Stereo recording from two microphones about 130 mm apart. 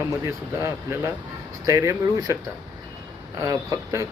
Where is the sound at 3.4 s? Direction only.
25° right (ahead or behind).